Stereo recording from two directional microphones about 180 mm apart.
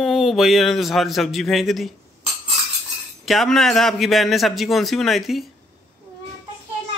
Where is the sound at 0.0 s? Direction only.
Centre (ahead or behind).